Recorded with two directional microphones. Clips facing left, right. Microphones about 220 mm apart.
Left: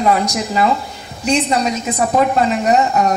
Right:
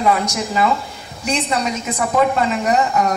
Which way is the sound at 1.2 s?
35° left (ahead or behind).